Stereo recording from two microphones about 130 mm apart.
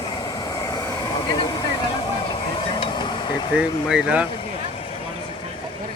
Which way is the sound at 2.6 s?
40° left (ahead or behind).